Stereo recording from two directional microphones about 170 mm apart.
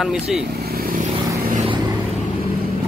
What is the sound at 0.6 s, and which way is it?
Vehicle, 65° right (ahead or behind).